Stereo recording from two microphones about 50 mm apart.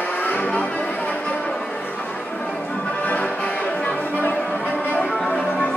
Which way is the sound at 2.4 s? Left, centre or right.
Left.